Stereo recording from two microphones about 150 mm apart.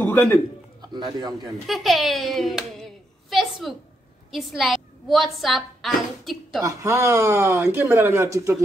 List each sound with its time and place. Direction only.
0.0 s a sound: 15° left (ahead or behind)
0.9 s a man's voice: 25° right (ahead or behind)
1.7 s a child's voice: centre (ahead or behind)
6.6 s speech: 20° right (ahead or behind)